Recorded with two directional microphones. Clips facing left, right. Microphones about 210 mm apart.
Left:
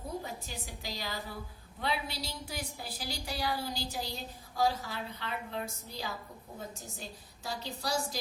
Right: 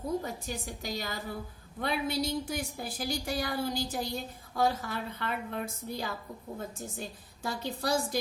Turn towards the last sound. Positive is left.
turn(degrees=-55)  # may be behind; listen again after turning